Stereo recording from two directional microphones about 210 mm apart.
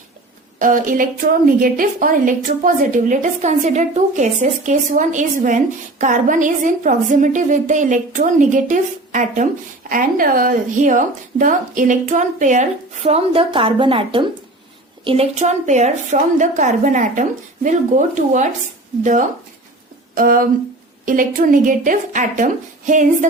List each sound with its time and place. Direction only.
0.6 s a woman's voice: 40° right (ahead or behind)